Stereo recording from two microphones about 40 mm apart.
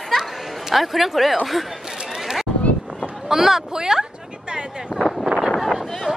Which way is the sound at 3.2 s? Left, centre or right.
Centre.